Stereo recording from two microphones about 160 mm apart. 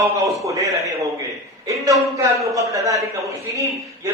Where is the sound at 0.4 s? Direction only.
20° right (ahead or behind).